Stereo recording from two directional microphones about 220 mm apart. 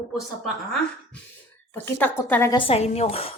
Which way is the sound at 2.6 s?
30° left (ahead or behind).